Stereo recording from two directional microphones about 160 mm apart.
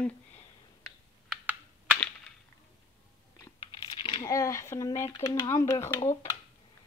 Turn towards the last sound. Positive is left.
turn(degrees=15)  # may be behind; listen again after turning